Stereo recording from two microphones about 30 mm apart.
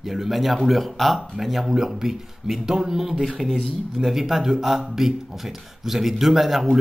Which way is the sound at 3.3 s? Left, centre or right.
Centre.